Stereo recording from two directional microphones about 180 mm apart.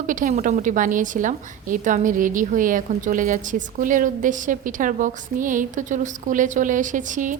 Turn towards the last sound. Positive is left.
turn(degrees=-45)  # may be behind; listen again after turning